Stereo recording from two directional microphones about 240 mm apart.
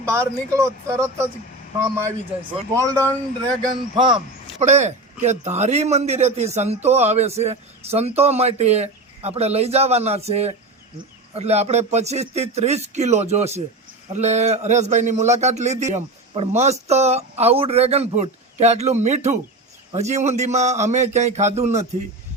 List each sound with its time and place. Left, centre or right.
0.0 s a man's voice: centre; by 21.8 s right